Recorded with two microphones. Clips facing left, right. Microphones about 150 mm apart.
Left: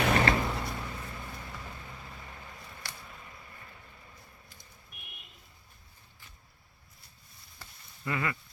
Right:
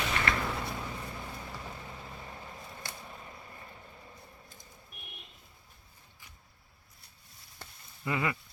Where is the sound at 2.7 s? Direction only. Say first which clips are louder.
Right 2 dB; 25° right (ahead or behind).